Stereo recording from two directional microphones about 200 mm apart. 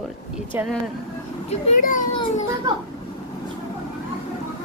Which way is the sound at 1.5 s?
40° left (ahead or behind).